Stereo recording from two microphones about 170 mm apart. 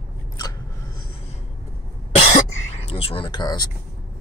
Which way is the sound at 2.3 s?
35° left (ahead or behind).